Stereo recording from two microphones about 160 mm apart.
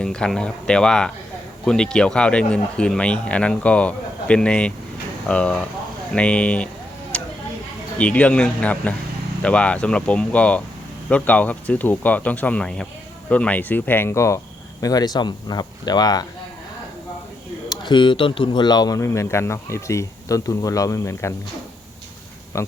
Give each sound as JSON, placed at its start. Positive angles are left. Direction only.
{"t": 0.0, "sound": "speech", "side_deg": 5}
{"t": 7.1, "sound": "a sound", "side_deg": 5}
{"t": 7.9, "sound": "speech", "side_deg": 10}
{"t": 17.7, "sound": "speech", "side_deg": 30}
{"t": 22.5, "sound": "speech", "side_deg": 15}